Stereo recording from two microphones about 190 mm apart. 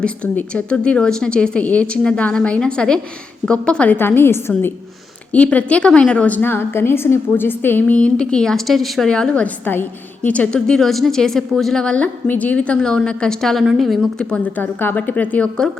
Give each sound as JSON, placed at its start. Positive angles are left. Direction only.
{"t": 0.0, "sound": "a woman's voice", "side_deg": 5}